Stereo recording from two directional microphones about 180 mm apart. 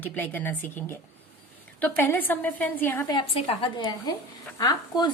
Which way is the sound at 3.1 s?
30° left (ahead or behind).